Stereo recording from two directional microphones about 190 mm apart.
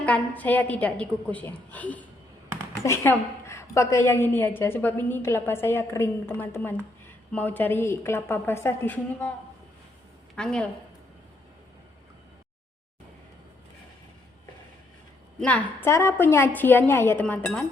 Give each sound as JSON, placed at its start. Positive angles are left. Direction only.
{"t": 0.0, "sound": "a woman's voice", "side_deg": 10}
{"t": 10.3, "sound": "a woman's voice", "side_deg": 5}
{"t": 15.4, "sound": "a woman's voice", "side_deg": 5}